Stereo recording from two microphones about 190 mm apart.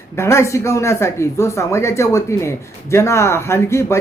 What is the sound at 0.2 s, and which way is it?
Speech, 15° left (ahead or behind).